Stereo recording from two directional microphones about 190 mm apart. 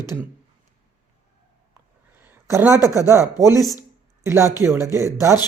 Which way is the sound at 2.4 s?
15° right (ahead or behind).